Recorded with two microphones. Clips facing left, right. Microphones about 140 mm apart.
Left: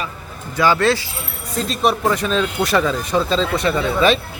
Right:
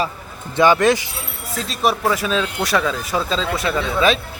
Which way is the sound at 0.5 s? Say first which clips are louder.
Right 2 dB; 20° right (ahead or behind).